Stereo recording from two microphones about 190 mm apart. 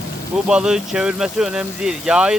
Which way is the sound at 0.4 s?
5° right (ahead or behind).